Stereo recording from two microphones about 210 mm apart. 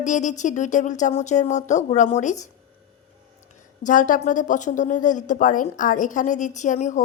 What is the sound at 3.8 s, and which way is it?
Speech, 40° left (ahead or behind).